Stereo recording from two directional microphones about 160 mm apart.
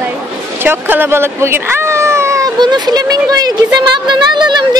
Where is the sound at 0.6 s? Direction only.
15° right (ahead or behind).